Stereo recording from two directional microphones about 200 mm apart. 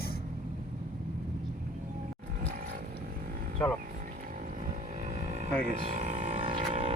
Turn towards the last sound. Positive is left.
turn(degrees=-30)  # may be behind; listen again after turning